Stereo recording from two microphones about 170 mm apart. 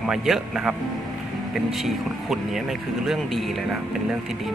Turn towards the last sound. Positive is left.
turn(degrees=0)  # may be behind; listen again after turning